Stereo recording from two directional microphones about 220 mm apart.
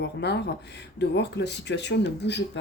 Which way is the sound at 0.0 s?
50° left (ahead or behind).